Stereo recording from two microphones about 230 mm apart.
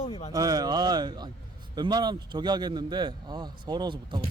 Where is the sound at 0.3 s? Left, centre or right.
Centre.